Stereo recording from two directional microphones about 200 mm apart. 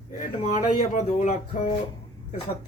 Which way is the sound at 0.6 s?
40° left (ahead or behind).